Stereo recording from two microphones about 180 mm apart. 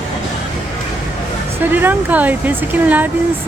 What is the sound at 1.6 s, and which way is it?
Speech, 10° right (ahead or behind).